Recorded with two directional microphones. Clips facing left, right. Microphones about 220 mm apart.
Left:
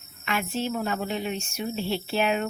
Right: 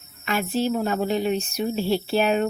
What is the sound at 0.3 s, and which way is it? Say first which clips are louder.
Speech: right 5 dB; 35° right (ahead or behind).